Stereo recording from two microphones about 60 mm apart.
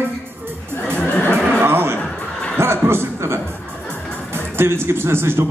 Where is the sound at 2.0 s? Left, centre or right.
Centre.